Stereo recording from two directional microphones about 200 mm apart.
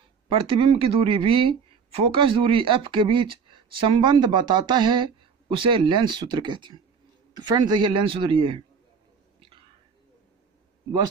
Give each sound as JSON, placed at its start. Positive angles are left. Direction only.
{"t": 0.3, "sound": "speech", "side_deg": -25}